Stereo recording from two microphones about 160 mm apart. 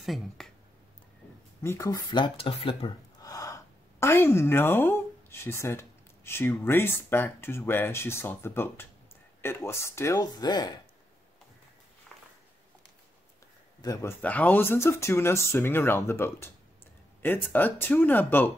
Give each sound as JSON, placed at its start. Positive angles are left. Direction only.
{"t": 0.0, "sound": "speech", "side_deg": 0}
{"t": 1.6, "sound": "speech", "side_deg": 20}
{"t": 3.2, "sound": "a woman's voice", "side_deg": 20}
{"t": 13.7, "sound": "a man's voice", "side_deg": 25}
{"t": 14.2, "sound": "speech", "side_deg": 10}